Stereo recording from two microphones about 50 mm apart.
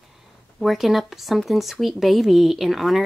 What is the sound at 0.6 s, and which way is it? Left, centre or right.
Speech, centre.